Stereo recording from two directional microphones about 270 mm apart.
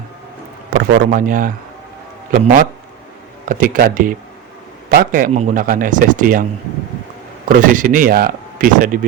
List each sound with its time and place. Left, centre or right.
0.7 s a man's voice: right
7.4 s speech: right